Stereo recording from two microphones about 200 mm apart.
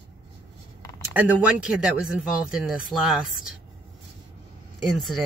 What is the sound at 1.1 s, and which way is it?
Speech, 5° right (ahead or behind).